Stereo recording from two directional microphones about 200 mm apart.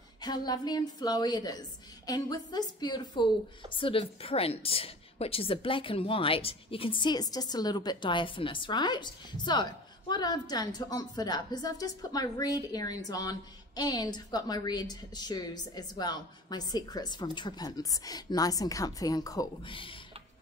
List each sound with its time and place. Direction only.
0.2 s a woman's voice: 20° left (ahead or behind)